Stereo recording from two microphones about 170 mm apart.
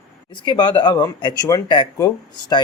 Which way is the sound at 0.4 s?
25° left (ahead or behind).